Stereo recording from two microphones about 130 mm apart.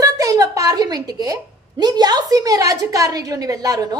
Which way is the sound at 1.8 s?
30° right (ahead or behind).